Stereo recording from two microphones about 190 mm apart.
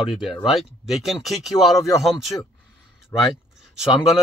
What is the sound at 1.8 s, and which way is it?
Speech, 20° left (ahead or behind).